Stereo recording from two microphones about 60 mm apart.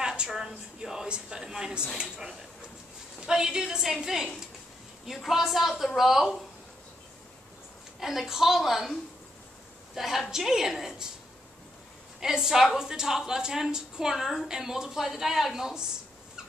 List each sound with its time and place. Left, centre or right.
0.0 s a sound: centre
0.3 s a woman's voice: centre
8.0 s a woman's voice: centre
9.9 s a woman's voice: centre
12.2 s a woman's voice: centre